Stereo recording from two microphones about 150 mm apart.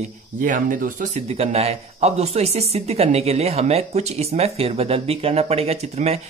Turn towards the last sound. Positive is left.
turn(degrees=-45)  # may be behind; listen again after turning